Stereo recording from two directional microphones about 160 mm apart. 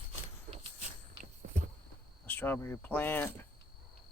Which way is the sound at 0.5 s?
35° right (ahead or behind).